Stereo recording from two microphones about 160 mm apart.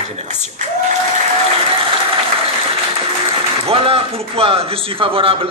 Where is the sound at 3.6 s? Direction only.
35° right (ahead or behind).